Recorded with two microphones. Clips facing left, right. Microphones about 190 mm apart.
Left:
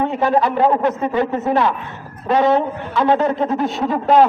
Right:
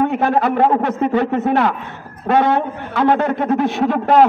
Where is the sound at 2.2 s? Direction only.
60° right (ahead or behind).